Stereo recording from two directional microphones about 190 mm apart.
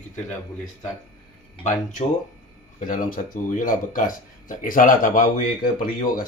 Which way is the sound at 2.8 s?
45° left (ahead or behind).